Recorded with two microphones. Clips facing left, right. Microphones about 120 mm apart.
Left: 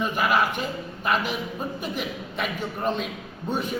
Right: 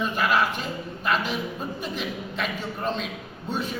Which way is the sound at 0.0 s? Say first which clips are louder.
Left 1 dB; 10° left (ahead or behind).